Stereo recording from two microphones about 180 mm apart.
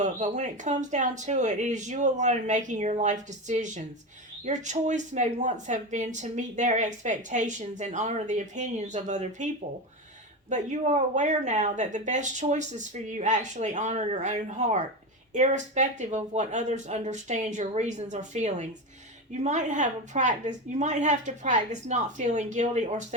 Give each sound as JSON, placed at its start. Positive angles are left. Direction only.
{"t": 0.0, "sound": "speech", "side_deg": -40}
{"t": 10.5, "sound": "speech", "side_deg": -40}